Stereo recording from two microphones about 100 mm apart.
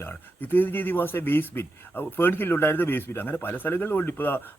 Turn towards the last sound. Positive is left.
turn(degrees=20)  # may be behind; listen again after turning